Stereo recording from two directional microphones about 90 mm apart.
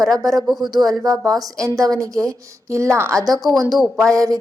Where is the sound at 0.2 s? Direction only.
40° right (ahead or behind).